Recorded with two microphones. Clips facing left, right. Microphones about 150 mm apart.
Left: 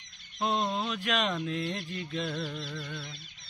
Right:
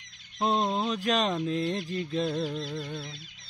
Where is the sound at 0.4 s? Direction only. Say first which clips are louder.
Right 3 dB; 35° right (ahead or behind).